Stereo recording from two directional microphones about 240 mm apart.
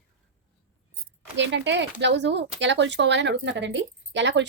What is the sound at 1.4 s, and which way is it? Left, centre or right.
Speech, right.